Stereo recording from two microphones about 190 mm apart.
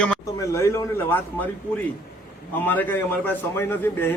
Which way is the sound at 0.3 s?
15° left (ahead or behind).